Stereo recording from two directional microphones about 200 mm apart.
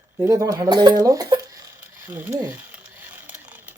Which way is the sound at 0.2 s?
15° right (ahead or behind).